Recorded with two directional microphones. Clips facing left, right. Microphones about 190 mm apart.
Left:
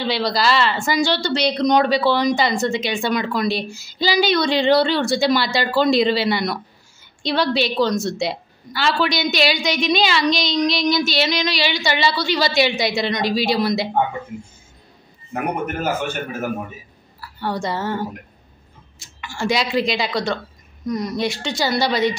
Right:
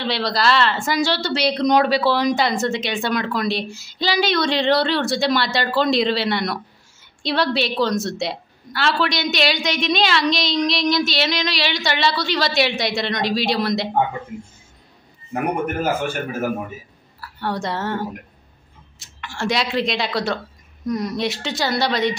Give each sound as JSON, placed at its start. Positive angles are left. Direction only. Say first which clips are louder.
{"t": 0.0, "sound": "a woman's voice", "louder": "left 1 dB", "side_deg": 0}
{"t": 15.8, "sound": "a man's voice", "louder": "right 1 dB", "side_deg": -5}